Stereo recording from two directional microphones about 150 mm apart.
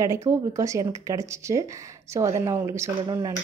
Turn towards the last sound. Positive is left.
turn(degrees=-25)  # may be behind; listen again after turning